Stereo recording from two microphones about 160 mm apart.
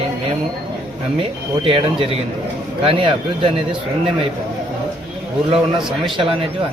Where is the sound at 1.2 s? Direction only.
35° right (ahead or behind).